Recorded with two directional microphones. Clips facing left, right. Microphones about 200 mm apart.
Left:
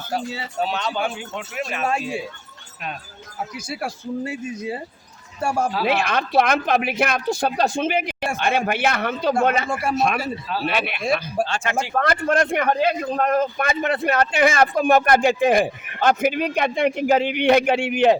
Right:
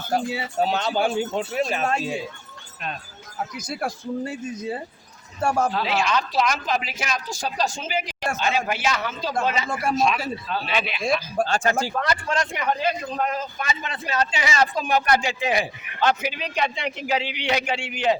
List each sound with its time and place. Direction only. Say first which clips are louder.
0.6 s speech: right 2 dB; 40° right (ahead or behind)
3.5 s speech: right 1 dB; 5° left (ahead or behind)
5.8 s speech: left 2 dB; 55° left (ahead or behind)
9.6 s speech: left 2 dB; 10° left (ahead or behind)
9.9 s speech: even; 65° left (ahead or behind)
11.4 s speech: right 3 dB; 40° right (ahead or behind)
11.9 s speech: left 5 dB; 55° left (ahead or behind)